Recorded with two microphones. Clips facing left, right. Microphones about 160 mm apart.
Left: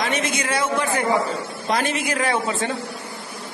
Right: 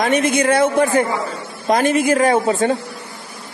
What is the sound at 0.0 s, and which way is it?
A woman's voice, 55° right (ahead or behind).